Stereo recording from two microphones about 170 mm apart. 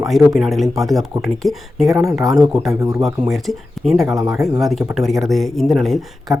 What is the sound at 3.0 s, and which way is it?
Speech, centre (ahead or behind).